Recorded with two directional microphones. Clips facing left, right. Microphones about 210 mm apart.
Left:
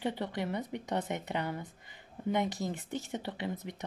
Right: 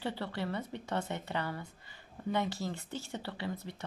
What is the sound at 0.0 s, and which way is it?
A woman's voice, 15° left (ahead or behind).